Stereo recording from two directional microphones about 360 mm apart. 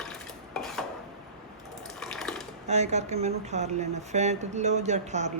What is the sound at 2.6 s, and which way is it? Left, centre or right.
Speech, centre.